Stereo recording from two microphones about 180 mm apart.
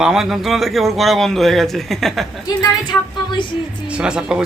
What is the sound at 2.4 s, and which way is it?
Speech, 25° left (ahead or behind).